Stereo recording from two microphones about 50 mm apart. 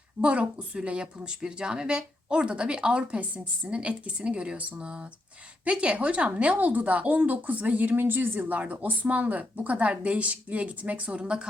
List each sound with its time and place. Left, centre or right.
0.2 s a woman's voice: right